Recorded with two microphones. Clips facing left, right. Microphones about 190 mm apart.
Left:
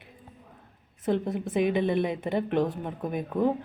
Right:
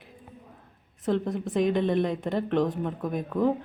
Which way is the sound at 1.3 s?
5° left (ahead or behind).